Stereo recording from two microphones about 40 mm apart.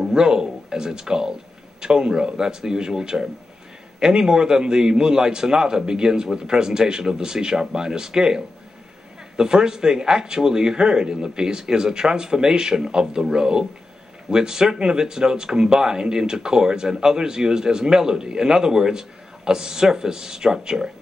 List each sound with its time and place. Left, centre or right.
0.0 s speech: centre
9.4 s speech: centre